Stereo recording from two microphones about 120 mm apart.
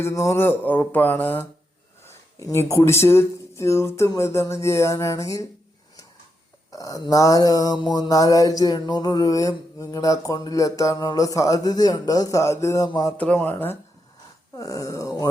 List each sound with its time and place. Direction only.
0.0 s mantra: 25° left (ahead or behind)
6.7 s mantra: 30° left (ahead or behind)
12.9 s speech: 30° left (ahead or behind)
13.1 s mantra: 10° left (ahead or behind)
14.5 s mantra: 30° left (ahead or behind)